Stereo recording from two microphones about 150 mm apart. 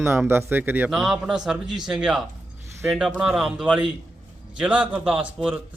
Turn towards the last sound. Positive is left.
turn(degrees=-5)  # may be behind; listen again after turning